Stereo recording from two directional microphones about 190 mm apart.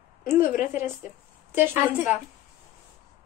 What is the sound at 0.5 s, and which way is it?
Speech, 40° left (ahead or behind).